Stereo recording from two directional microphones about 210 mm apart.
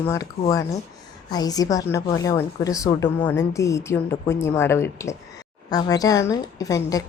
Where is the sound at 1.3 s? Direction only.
20° left (ahead or behind).